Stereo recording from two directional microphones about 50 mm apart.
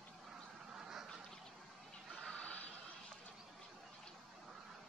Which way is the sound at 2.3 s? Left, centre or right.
Left.